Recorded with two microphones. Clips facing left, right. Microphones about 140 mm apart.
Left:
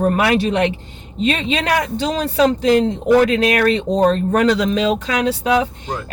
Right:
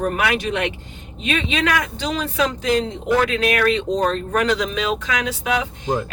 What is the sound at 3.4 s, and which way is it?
Speech, 35° left (ahead or behind).